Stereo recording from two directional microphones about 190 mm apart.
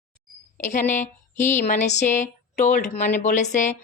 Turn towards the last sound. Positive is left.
turn(degrees=40)  # may be behind; listen again after turning